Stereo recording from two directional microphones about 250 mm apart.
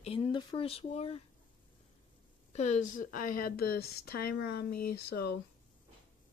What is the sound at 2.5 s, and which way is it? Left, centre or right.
Speech, left.